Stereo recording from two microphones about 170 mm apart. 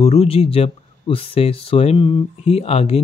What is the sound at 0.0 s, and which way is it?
Speech, 35° left (ahead or behind).